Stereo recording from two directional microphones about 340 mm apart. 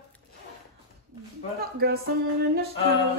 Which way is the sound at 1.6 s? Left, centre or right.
Right.